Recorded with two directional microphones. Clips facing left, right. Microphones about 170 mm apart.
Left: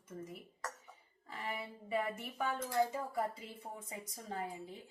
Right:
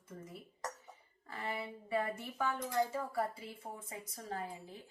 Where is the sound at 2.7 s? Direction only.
20° left (ahead or behind).